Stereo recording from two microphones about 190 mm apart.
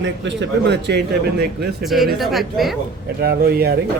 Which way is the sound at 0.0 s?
70° right (ahead or behind).